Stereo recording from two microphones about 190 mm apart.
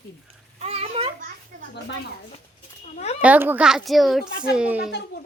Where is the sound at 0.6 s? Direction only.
30° right (ahead or behind).